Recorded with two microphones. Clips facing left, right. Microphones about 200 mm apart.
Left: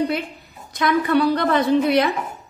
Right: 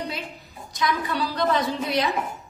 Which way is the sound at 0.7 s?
60° left (ahead or behind).